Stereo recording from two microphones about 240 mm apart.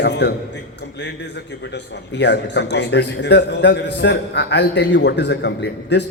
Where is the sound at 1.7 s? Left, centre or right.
Left.